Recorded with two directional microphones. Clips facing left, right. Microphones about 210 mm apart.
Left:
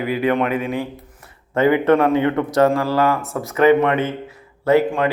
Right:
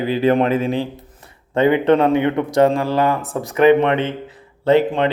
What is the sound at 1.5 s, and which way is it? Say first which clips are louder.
A man's voice: right 1 dB; 20° right (ahead or behind).